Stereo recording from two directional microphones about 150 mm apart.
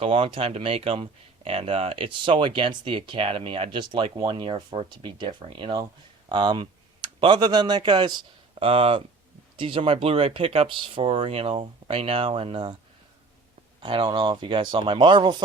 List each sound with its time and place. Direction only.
0.0 s speech: 35° right (ahead or behind)
13.8 s speech: 35° right (ahead or behind)